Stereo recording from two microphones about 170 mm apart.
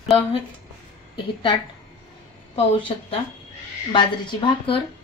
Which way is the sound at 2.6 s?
30° left (ahead or behind).